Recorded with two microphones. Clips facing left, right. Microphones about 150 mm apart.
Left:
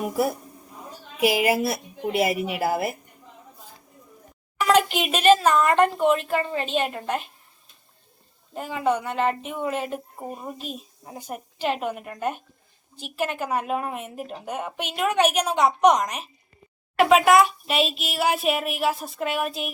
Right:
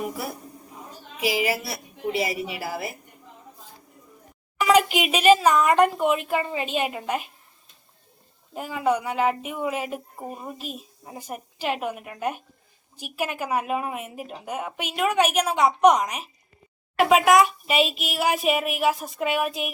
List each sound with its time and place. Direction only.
1.2 s a woman's voice: 55° left (ahead or behind)
4.6 s a woman's voice: 5° right (ahead or behind)
8.5 s a woman's voice: 5° right (ahead or behind)